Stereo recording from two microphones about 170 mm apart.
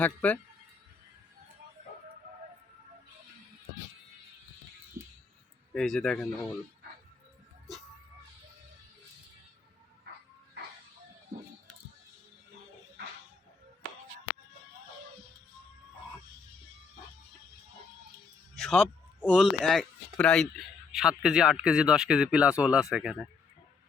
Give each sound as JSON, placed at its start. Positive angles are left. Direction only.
{"t": 0.0, "sound": "speech", "side_deg": 10}
{"t": 5.7, "sound": "speech", "side_deg": 5}
{"t": 18.6, "sound": "speech", "side_deg": 0}